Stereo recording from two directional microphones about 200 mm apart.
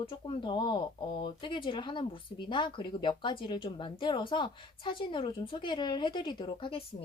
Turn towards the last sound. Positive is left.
turn(degrees=25)  # may be behind; listen again after turning